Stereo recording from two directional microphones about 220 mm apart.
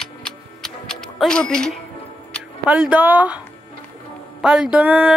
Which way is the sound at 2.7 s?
10° right (ahead or behind).